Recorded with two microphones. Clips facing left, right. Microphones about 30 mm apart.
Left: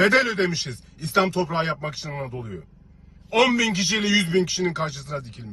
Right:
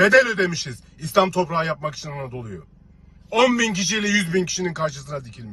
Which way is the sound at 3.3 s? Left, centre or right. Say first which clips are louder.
Right 1 dB; left.